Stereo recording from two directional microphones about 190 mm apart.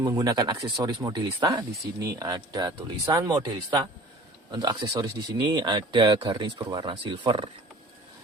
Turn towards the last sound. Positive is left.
turn(degrees=-25)  # may be behind; listen again after turning